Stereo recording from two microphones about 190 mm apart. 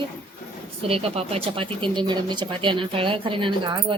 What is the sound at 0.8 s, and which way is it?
Speech, 30° right (ahead or behind).